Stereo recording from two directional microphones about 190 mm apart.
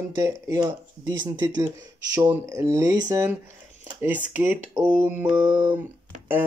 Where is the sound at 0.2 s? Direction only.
15° right (ahead or behind).